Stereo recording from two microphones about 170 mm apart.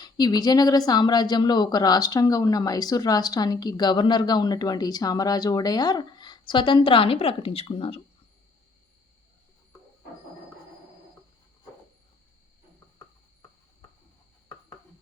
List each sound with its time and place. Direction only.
0.0 s a woman's voice: 25° left (ahead or behind)